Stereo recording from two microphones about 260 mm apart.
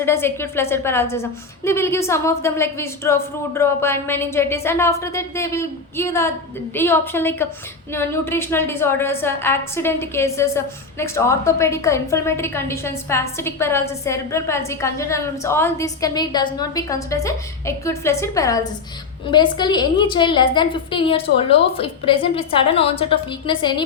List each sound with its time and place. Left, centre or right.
0.0 s a woman's voice: centre